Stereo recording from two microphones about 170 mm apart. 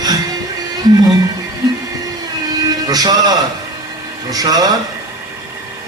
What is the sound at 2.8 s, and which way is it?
Speech, 25° right (ahead or behind).